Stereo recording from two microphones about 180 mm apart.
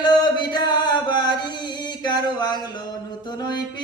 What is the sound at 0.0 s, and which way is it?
Chant, 25° left (ahead or behind).